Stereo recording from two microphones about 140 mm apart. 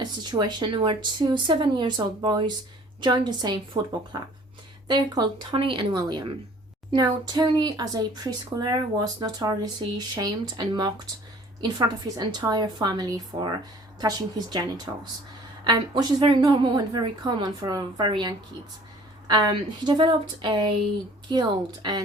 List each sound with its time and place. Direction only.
0.0 s speech: 30° right (ahead or behind)
3.7 s speech: 50° right (ahead or behind)
4.1 s speech: 30° right (ahead or behind)